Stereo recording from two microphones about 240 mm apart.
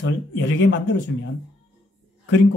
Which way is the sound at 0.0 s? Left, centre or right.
Left.